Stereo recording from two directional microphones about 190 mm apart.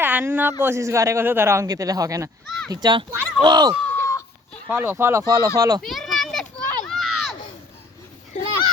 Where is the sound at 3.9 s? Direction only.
15° left (ahead or behind).